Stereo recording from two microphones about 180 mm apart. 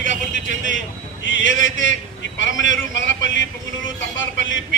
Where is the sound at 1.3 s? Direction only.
90° left.